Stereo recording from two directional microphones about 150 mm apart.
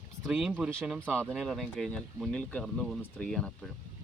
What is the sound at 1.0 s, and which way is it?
Speech, 5° left (ahead or behind).